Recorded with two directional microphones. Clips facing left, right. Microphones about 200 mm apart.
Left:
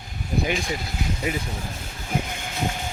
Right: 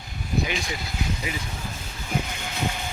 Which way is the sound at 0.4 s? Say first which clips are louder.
Left 4 dB; 45° left (ahead or behind).